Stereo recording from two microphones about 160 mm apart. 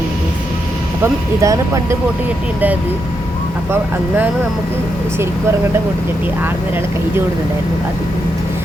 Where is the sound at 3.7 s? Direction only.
10° right (ahead or behind).